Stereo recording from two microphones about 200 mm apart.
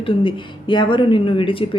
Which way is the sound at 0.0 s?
25° left (ahead or behind).